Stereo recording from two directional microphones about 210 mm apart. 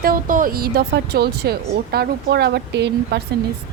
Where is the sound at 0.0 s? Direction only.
40° right (ahead or behind).